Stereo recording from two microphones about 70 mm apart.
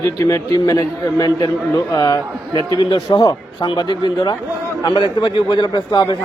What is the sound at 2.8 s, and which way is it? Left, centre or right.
A man's voice, left.